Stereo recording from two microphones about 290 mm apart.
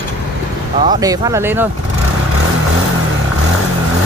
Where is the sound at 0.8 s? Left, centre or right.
Centre.